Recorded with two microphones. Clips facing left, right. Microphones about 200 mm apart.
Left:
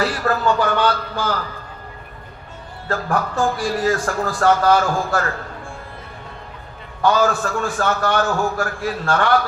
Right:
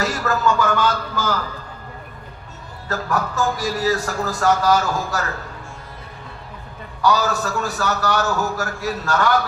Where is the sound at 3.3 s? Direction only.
40° right (ahead or behind).